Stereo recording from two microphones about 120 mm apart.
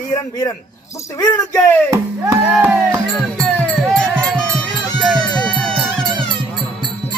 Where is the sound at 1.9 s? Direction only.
25° right (ahead or behind).